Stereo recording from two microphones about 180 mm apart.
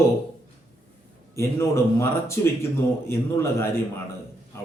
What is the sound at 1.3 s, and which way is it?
A man's voice, 15° left (ahead or behind).